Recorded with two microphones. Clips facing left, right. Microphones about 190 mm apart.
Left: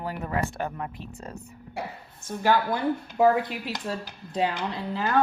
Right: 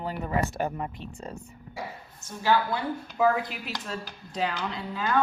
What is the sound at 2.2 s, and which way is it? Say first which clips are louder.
Speech: left 2 dB; 50° left (ahead or behind).